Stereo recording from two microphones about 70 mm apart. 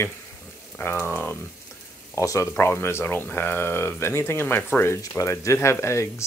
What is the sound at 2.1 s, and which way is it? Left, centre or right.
Speech, left.